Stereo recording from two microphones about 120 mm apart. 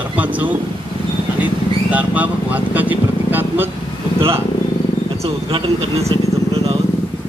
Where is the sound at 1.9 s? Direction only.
15° right (ahead or behind).